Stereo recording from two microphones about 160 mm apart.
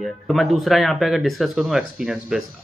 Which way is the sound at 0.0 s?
Centre (ahead or behind).